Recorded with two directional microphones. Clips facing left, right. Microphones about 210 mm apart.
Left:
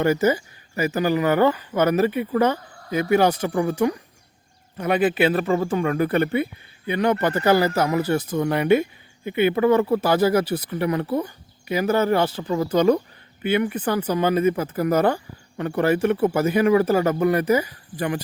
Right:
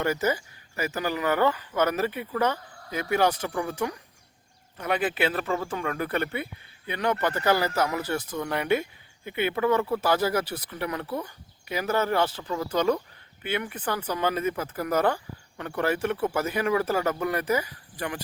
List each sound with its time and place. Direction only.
0.0 s speech: 15° left (ahead or behind)
11.7 s speech: 10° left (ahead or behind)
12.4 s speech: 25° left (ahead or behind)
13.4 s speech: 10° left (ahead or behind)